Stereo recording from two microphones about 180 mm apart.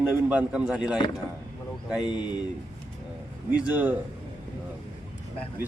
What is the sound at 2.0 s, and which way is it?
Speech, 25° left (ahead or behind).